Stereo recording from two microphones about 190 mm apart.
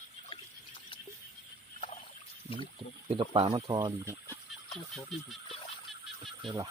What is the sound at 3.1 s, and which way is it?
Speech, 30° right (ahead or behind).